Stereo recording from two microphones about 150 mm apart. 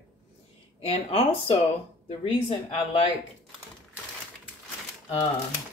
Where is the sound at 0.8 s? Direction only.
40° left (ahead or behind).